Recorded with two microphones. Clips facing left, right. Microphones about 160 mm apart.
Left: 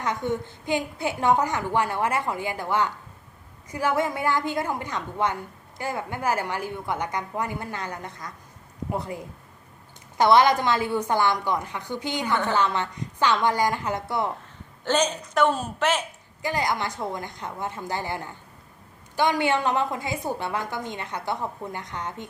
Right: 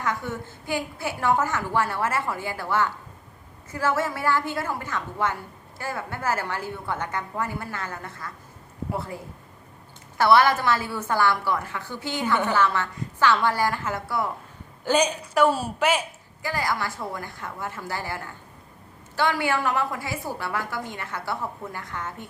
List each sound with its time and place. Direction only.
0.0 s a woman's voice: 20° left (ahead or behind)
14.8 s a woman's voice: 10° right (ahead or behind)
16.4 s a woman's voice: 20° left (ahead or behind)